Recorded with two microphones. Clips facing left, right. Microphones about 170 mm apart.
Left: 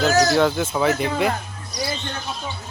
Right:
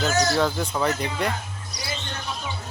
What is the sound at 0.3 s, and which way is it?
Speech, centre (ahead or behind).